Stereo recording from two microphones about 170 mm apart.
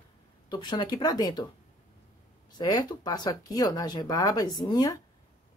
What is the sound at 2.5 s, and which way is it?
Speech, 25° left (ahead or behind).